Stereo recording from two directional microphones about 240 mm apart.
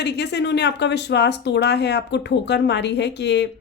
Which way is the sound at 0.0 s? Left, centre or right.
Left.